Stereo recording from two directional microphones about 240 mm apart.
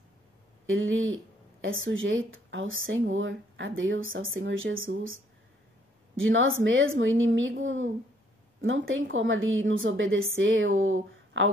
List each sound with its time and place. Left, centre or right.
0.7 s speech: right